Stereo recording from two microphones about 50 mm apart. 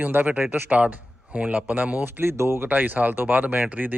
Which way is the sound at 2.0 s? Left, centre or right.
Right.